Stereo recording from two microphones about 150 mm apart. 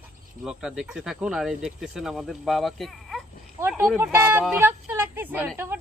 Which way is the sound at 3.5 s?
15° right (ahead or behind).